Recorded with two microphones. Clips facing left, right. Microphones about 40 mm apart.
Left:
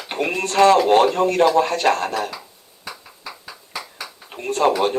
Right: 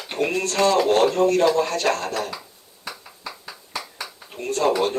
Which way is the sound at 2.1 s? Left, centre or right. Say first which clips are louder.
Left 2 dB; centre.